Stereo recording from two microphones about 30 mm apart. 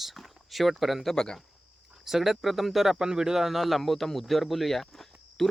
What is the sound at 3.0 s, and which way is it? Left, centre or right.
A man's voice, right.